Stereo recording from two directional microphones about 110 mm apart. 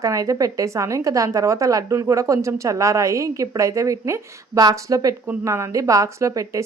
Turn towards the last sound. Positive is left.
turn(degrees=-30)  # may be behind; listen again after turning